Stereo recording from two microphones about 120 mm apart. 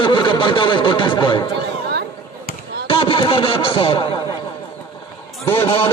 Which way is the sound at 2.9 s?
45° left (ahead or behind).